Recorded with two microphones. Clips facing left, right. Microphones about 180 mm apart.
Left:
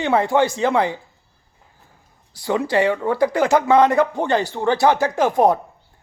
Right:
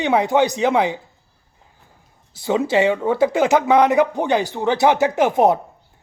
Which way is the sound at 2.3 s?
20° right (ahead or behind).